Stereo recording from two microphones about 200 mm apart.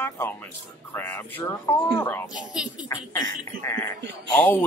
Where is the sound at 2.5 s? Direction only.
5° right (ahead or behind).